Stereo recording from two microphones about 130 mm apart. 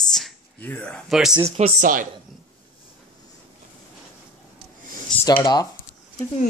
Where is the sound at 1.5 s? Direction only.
60° right (ahead or behind); by 2.0 s 75° right (ahead or behind).